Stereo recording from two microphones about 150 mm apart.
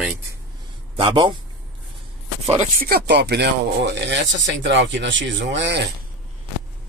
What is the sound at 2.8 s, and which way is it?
Speech, 90° right.